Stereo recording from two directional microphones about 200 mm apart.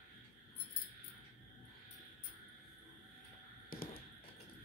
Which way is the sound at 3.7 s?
50° left (ahead or behind).